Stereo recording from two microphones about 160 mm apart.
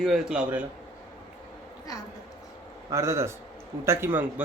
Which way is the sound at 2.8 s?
15° right (ahead or behind).